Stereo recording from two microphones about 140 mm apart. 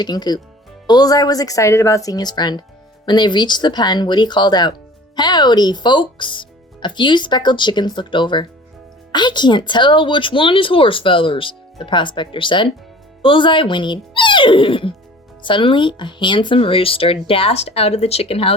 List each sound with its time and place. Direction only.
0.0 s a woman's voice: 30° left (ahead or behind)